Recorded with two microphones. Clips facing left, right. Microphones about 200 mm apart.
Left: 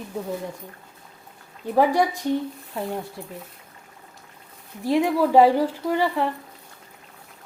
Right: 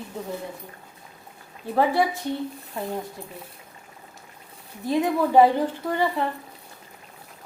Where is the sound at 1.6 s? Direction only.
15° left (ahead or behind).